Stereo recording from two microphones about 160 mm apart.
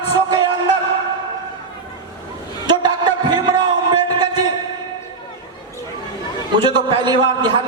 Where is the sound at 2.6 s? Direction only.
25° right (ahead or behind).